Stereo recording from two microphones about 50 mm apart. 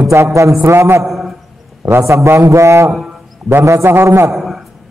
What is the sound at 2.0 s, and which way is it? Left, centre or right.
A man's voice, right.